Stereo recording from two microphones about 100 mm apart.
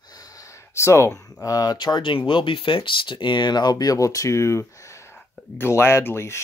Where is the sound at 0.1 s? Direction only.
35° left (ahead or behind).